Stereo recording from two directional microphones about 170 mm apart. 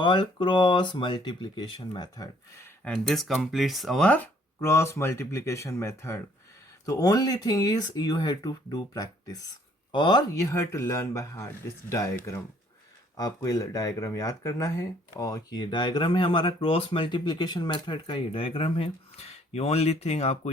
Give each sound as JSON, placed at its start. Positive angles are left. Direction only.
{"t": 0.0, "sound": "speech", "side_deg": 25}
{"t": 2.8, "sound": "speech", "side_deg": 0}
{"t": 13.1, "sound": "speech", "side_deg": 20}